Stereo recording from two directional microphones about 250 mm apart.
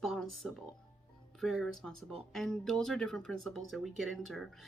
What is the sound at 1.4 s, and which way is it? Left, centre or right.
Speech, centre.